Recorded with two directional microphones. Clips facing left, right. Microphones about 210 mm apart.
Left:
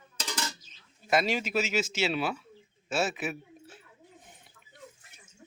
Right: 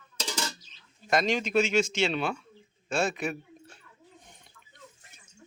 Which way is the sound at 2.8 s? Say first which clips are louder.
Right 2 dB; 5° left (ahead or behind).